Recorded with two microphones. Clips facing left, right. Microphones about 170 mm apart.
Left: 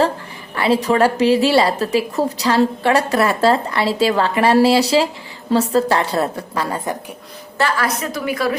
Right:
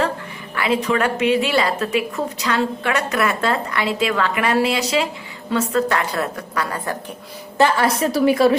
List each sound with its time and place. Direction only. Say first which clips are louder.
0.5 s a woman's voice: left 3 dB; 30° left (ahead or behind)
7.6 s a woman's voice: right 3 dB; 30° right (ahead or behind)